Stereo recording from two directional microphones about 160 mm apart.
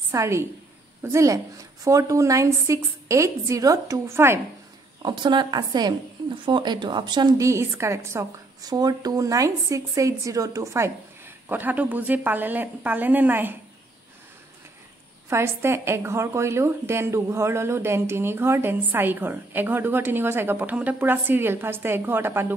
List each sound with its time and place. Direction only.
0.1 s a woman's voice: 15° right (ahead or behind)
5.0 s a woman's voice: 30° right (ahead or behind); by 13.6 s 10° right (ahead or behind)
15.2 s a woman's voice: 15° right (ahead or behind)